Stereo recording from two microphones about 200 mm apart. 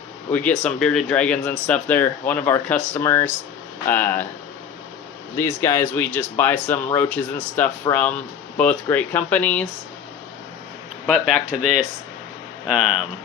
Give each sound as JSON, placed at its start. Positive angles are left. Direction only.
{"t": 0.3, "sound": "speech", "side_deg": 5}
{"t": 5.4, "sound": "speech", "side_deg": 10}
{"t": 11.3, "sound": "speech", "side_deg": -40}
{"t": 12.6, "sound": "speech", "side_deg": -5}